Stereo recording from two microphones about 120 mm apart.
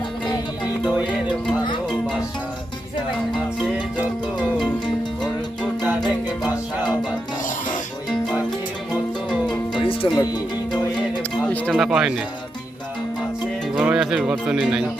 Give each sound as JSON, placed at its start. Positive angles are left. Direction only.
{"t": 6.4, "sound": "music", "side_deg": -10}
{"t": 9.7, "sound": "music", "side_deg": 50}
{"t": 10.2, "sound": "music", "side_deg": 35}
{"t": 11.4, "sound": "a sound", "side_deg": 10}
{"t": 11.8, "sound": "speech", "side_deg": -5}
{"t": 13.7, "sound": "speech", "side_deg": -5}